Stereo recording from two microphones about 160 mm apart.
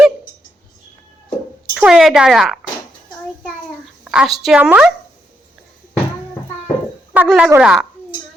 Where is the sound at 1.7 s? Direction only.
5° right (ahead or behind).